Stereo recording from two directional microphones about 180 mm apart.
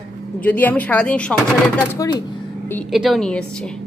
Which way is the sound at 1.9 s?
20° left (ahead or behind).